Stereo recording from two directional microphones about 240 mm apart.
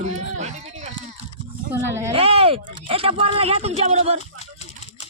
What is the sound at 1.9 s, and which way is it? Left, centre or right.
Speech, centre.